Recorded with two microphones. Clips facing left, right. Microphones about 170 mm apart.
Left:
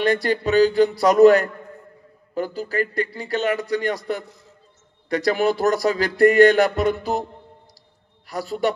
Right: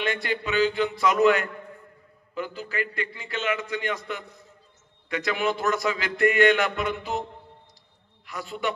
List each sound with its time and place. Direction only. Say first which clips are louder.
0.0 s a man's voice: left 8 dB; 40° left (ahead or behind)
8.3 s a man's voice: left 7 dB; 35° left (ahead or behind)